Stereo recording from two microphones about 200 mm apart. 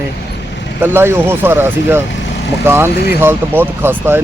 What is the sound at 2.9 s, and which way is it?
Speech, 50° left (ahead or behind).